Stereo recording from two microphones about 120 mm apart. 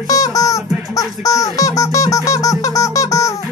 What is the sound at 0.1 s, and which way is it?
Music, 30° left (ahead or behind).